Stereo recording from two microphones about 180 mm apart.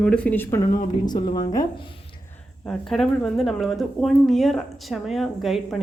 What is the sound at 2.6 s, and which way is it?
Speech, centre (ahead or behind).